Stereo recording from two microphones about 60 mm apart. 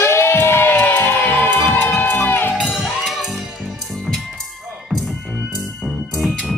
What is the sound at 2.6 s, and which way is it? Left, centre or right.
Music, centre.